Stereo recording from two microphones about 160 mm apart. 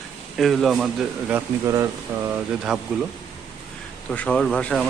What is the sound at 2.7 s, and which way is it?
Speech, 5° right (ahead or behind).